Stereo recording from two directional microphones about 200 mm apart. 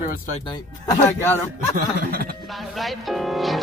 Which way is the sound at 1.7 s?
45° right (ahead or behind).